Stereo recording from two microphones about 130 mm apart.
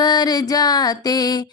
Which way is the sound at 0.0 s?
30° left (ahead or behind).